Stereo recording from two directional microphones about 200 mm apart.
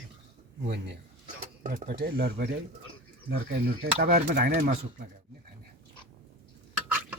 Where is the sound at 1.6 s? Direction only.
40° right (ahead or behind).